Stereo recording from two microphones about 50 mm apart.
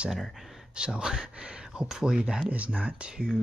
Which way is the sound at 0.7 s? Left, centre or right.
Centre.